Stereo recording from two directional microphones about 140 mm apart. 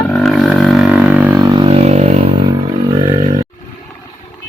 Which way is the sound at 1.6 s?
45° right (ahead or behind).